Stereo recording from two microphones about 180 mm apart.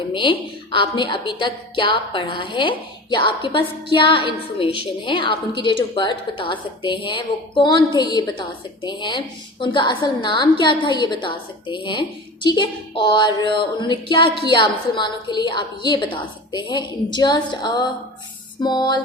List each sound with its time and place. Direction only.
0.1 s a woman's voice: 25° left (ahead or behind)